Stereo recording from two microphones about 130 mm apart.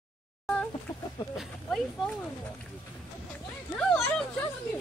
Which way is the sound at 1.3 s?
Centre (ahead or behind).